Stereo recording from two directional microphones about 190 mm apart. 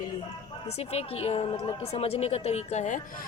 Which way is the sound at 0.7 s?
30° left (ahead or behind).